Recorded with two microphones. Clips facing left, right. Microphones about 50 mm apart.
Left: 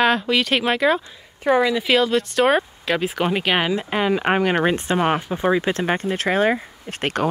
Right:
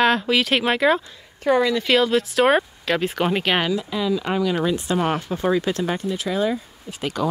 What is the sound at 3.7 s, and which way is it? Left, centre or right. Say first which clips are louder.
Speech: left 2 dB; left.